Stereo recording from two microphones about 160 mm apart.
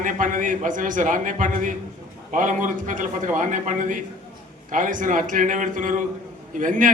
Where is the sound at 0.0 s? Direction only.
55° right (ahead or behind).